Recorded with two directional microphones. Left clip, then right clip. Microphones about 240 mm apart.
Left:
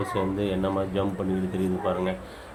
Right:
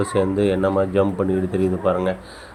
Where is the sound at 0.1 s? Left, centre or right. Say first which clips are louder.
Right 9 dB; right.